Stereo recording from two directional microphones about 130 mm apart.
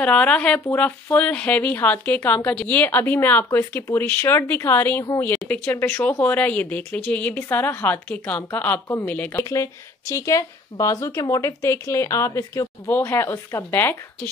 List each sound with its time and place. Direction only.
0.0 s speech: 10° left (ahead or behind)
8.8 s speech: 20° left (ahead or behind)
9.1 s speech: 10° left (ahead or behind)
9.4 s speech: 25° left (ahead or behind)